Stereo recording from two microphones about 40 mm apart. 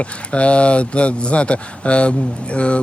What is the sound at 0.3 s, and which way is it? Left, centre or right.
Speech, left.